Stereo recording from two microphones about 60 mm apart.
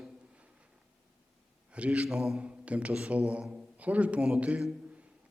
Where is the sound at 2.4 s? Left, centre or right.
Right.